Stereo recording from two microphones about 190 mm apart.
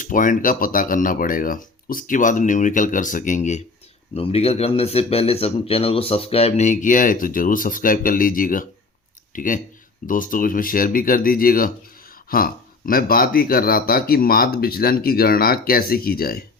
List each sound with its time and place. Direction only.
0.0 s speech: 45° left (ahead or behind)